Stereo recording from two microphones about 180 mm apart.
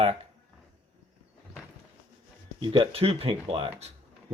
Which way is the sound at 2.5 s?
30° right (ahead or behind).